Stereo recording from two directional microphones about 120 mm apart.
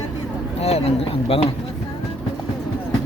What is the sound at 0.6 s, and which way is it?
Speech, 55° left (ahead or behind).